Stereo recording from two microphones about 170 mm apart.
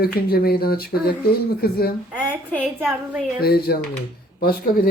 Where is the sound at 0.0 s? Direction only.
65° left (ahead or behind).